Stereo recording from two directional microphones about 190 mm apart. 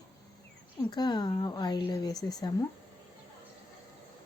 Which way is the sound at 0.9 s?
20° left (ahead or behind).